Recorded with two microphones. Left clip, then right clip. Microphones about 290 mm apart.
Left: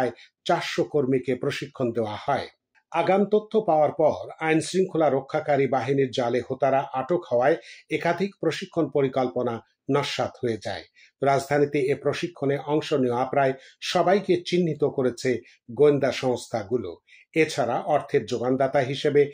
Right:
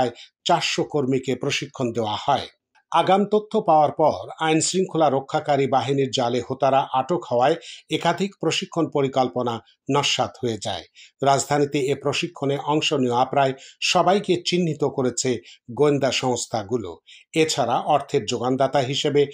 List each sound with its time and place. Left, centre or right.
0.0 s speech: centre